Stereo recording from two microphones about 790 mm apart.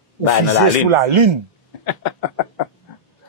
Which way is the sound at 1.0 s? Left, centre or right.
Right.